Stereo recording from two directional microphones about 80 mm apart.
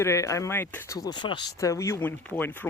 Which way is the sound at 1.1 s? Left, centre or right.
Left.